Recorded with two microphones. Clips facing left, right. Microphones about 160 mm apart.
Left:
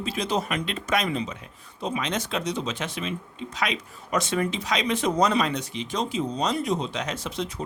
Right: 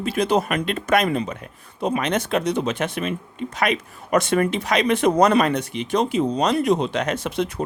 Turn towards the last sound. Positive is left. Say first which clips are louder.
# right 7 dB
turn(degrees=-60)  # may be behind; listen again after turning